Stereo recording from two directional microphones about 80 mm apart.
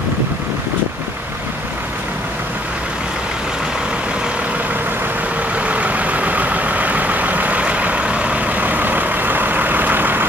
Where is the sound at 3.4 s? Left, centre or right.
Centre.